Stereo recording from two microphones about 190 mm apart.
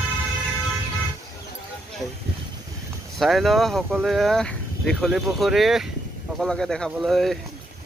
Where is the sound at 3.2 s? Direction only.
Centre (ahead or behind).